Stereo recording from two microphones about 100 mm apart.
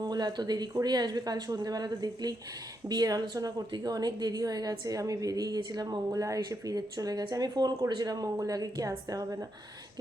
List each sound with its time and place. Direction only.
0.1 s a woman's voice: 45° right (ahead or behind)